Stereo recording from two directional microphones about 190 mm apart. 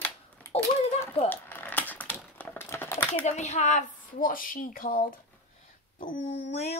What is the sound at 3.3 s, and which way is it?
A woman's voice, 35° left (ahead or behind).